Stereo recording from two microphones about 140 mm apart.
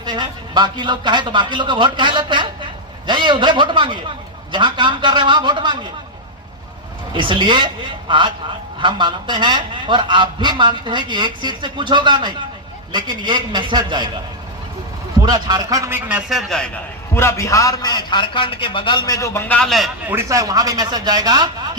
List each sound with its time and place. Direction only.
0.0 s a man's voice: 30° right (ahead or behind)
7.1 s a man's voice: 35° right (ahead or behind)
15.2 s speech: 30° right (ahead or behind)
15.9 s a man's voice: 15° right (ahead or behind)
16.5 s a man's voice: 5° left (ahead or behind)
17.2 s a man's voice: 20° left (ahead or behind); by 19.9 s centre (ahead or behind)
20.1 s speech: 20° right (ahead or behind)